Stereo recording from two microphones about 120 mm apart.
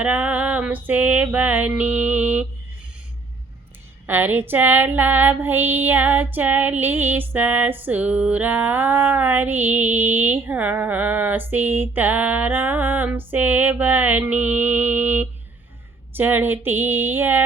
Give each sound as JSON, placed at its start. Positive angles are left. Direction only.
{"t": 0.0, "sound": "female singing", "side_deg": -10}
{"t": 4.0, "sound": "female singing", "side_deg": -15}